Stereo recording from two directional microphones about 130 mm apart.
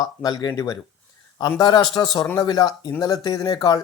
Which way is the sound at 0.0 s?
30° left (ahead or behind).